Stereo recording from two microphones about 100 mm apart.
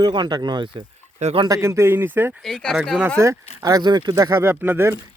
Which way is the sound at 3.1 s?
35° right (ahead or behind).